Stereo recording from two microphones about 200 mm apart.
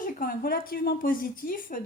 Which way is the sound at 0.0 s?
45° left (ahead or behind).